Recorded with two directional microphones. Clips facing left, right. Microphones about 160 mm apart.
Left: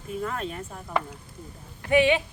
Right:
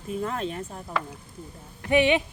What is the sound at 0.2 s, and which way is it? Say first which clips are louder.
Speech: right 1 dB; 30° right (ahead or behind).